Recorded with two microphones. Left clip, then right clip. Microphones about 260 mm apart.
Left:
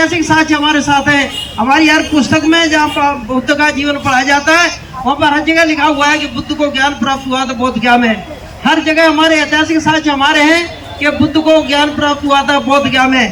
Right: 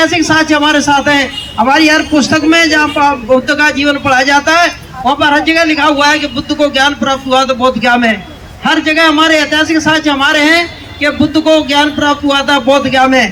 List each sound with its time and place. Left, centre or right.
0.0 s a man's voice: right